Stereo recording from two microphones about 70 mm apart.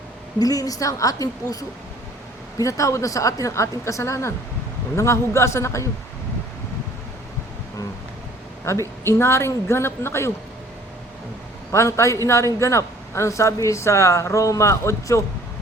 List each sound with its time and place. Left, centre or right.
0.3 s a woman's voice: left
2.6 s a man's voice: left
8.6 s a woman's voice: left
11.7 s a man's voice: left